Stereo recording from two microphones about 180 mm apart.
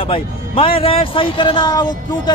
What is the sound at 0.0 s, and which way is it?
Speech, 30° left (ahead or behind).